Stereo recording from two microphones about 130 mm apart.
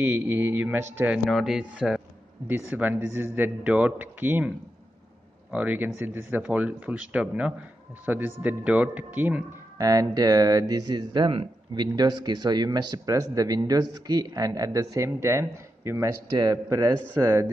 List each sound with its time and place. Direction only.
0.0 s speech: 15° right (ahead or behind)
1.2 s speech: centre (ahead or behind)
5.5 s speech: 10° right (ahead or behind)
9.8 s speech: 25° right (ahead or behind)